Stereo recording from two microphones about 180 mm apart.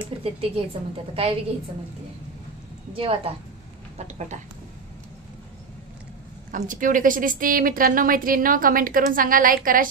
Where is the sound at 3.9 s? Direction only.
40° right (ahead or behind).